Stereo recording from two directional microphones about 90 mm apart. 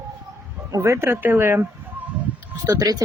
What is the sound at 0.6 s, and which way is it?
Speech, 35° right (ahead or behind).